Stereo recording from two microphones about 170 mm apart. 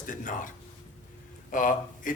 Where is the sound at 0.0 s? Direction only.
50° left (ahead or behind).